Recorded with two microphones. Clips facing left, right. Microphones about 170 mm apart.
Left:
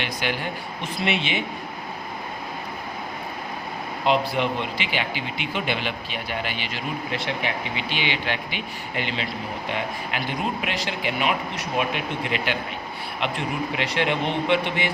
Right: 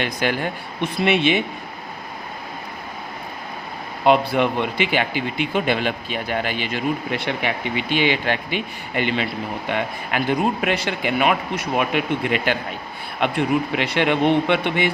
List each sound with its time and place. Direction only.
0.0 s speech: 45° right (ahead or behind)
4.0 s speech: 55° right (ahead or behind)